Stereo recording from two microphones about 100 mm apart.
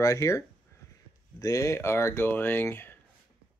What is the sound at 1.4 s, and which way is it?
Speech, 35° left (ahead or behind).